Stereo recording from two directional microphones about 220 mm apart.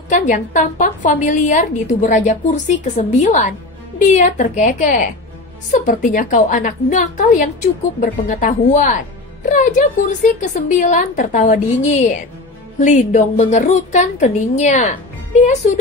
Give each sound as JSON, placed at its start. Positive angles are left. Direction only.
{"t": 0.1, "sound": "a woman's voice", "side_deg": 35}